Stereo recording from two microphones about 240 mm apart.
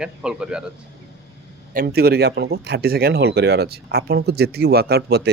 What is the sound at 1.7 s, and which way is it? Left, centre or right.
Speech, right.